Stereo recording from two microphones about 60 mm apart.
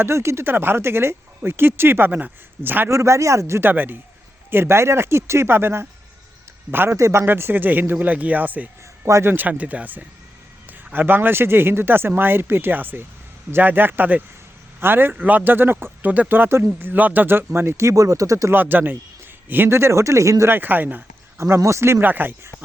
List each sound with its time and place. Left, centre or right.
0.0 s speech: right
2.9 s speech: right
3.6 s speech: right
4.5 s speech: right
6.9 s speech: right
7.3 s speech: right
9.5 s speech: right
15.1 s speech: right
18.5 s speech: right
19.7 s speech: right
20.5 s speech: right
21.3 s speech: right
22.0 s speech: right